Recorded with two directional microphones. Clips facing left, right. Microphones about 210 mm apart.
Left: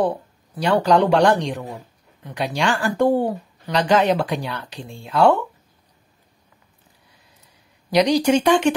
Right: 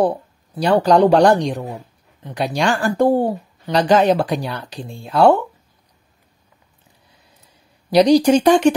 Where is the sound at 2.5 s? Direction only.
40° right (ahead or behind).